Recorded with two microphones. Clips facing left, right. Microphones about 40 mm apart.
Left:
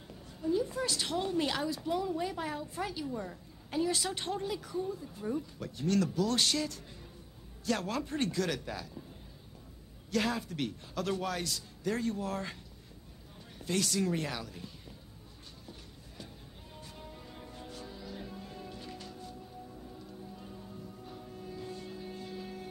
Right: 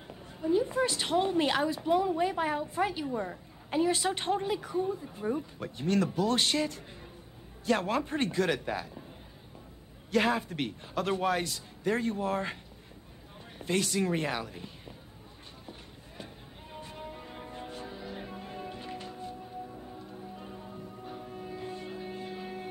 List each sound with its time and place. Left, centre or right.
0.1 s a woman's voice: right
10.1 s a woman's voice: right
13.6 s a woman's voice: right
16.7 s music: right